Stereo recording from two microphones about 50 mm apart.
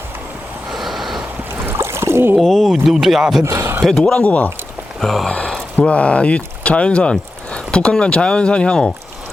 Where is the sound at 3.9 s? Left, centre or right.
Centre.